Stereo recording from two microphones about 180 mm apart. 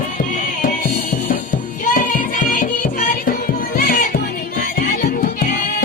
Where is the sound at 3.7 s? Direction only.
55° left (ahead or behind).